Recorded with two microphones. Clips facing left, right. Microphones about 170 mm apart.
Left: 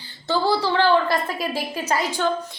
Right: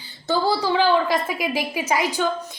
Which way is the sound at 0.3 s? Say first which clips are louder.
Even; 15° right (ahead or behind).